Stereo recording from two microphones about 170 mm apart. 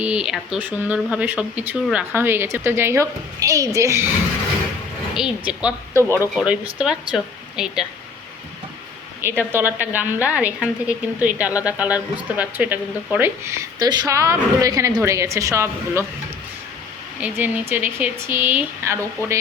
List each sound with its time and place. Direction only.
0.0 s a woman's voice: 5° right (ahead or behind)
5.1 s a woman's voice: 5° right (ahead or behind)
9.4 s a woman's voice: 10° right (ahead or behind)
17.2 s a woman's voice: 10° right (ahead or behind)